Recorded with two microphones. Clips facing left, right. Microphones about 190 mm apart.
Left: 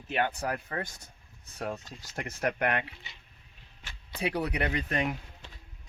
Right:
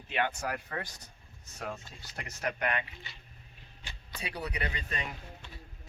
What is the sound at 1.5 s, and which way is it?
Speech, 35° left (ahead or behind).